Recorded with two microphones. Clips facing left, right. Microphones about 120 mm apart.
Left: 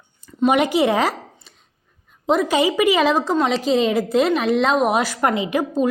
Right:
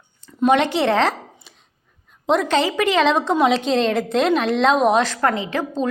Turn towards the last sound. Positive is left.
turn(degrees=10)  # may be behind; listen again after turning